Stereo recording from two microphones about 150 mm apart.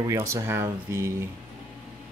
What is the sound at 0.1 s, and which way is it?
Speech, 20° right (ahead or behind).